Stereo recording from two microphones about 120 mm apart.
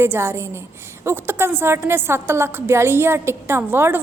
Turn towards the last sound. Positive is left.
turn(degrees=-15)  # may be behind; listen again after turning